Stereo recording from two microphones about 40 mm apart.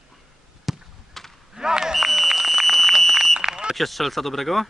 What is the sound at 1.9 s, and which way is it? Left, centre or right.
Smoke detector, centre.